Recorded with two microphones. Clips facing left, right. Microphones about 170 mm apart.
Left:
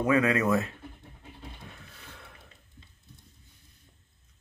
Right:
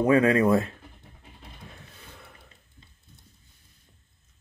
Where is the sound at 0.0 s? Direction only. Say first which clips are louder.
Right 5 dB; 30° right (ahead or behind).